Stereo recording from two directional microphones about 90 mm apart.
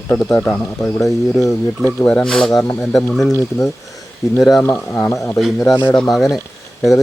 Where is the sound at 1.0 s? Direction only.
Centre (ahead or behind).